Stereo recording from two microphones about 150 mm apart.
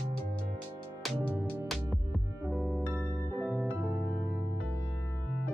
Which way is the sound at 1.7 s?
Centre (ahead or behind).